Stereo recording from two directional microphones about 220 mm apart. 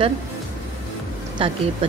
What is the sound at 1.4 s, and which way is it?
Speech, 25° right (ahead or behind).